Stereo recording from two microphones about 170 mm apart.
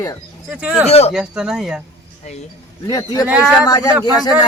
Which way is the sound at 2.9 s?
20° left (ahead or behind).